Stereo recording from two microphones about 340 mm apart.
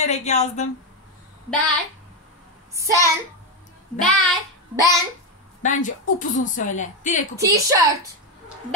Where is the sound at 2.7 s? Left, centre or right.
Centre.